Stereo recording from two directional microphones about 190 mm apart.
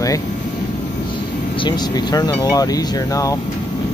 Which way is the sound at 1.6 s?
20° left (ahead or behind).